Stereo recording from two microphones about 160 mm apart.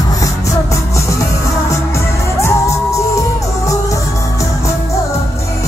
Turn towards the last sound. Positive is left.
turn(degrees=20)  # may be behind; listen again after turning